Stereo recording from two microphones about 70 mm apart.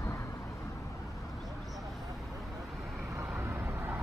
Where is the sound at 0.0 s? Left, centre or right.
Left.